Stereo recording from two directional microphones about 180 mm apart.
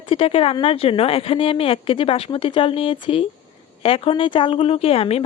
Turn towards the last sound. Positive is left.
turn(degrees=30)  # may be behind; listen again after turning